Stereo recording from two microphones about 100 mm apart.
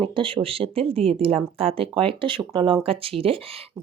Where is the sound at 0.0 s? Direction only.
60° right (ahead or behind).